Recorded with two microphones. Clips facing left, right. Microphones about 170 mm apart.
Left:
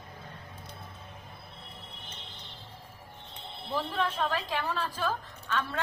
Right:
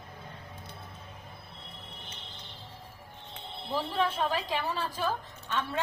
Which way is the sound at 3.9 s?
10° right (ahead or behind).